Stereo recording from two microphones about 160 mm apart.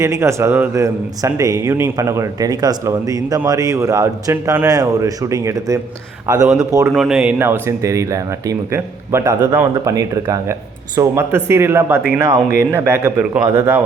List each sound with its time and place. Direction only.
0.0 s a man's voice: 20° right (ahead or behind)
6.2 s speech: 5° right (ahead or behind)
6.7 s a man's voice: 20° right (ahead or behind)
6.9 s a man's voice: centre (ahead or behind)